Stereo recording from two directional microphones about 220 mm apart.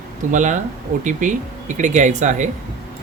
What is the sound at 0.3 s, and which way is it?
Speech, 35° right (ahead or behind).